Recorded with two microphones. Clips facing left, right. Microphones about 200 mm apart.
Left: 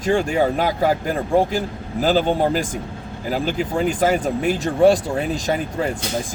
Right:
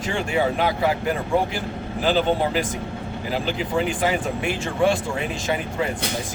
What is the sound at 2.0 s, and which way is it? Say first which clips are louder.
Speech: left 3 dB; 45° left (ahead or behind).